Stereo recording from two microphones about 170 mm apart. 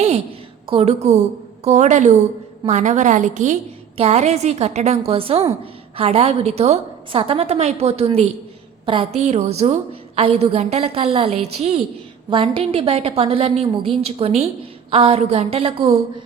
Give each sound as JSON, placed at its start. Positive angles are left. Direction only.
{"t": 0.7, "sound": "a woman's voice", "side_deg": -35}